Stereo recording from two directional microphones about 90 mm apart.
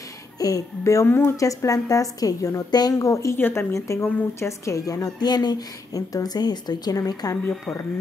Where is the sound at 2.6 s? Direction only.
50° left (ahead or behind).